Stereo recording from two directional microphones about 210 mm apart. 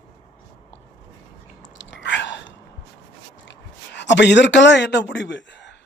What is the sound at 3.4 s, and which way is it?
Speech, 60° left (ahead or behind).